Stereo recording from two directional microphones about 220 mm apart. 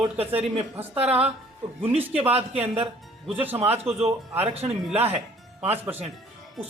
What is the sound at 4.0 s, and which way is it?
Speech, 30° right (ahead or behind).